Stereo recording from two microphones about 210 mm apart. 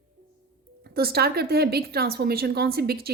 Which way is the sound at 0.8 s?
50° right (ahead or behind).